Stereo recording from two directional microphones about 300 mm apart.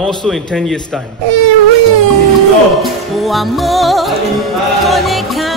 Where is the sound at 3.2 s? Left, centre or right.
Centre.